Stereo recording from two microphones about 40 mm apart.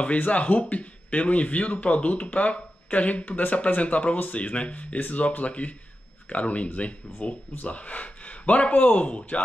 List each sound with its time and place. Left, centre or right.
0.0 s speech: left